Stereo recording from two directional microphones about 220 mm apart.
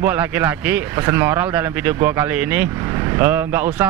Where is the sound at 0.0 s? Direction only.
10° right (ahead or behind).